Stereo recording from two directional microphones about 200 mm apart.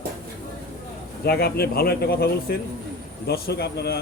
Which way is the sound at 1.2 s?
50° left (ahead or behind).